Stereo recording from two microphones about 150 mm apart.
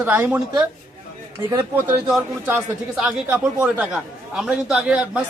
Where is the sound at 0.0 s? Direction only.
10° right (ahead or behind).